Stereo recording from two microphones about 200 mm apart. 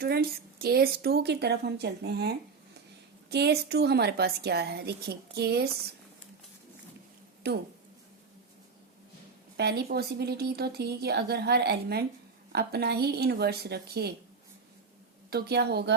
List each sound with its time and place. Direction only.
0.0 s a woman's voice: 50° right (ahead or behind)
9.6 s speech: 55° right (ahead or behind)
15.3 s a woman's voice: 55° right (ahead or behind)